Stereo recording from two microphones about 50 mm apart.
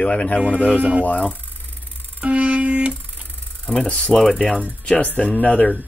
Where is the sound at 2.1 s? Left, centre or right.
Right.